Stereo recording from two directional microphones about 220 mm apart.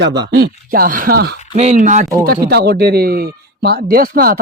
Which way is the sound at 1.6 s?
35° right (ahead or behind).